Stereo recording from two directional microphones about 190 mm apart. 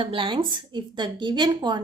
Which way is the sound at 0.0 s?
25° right (ahead or behind).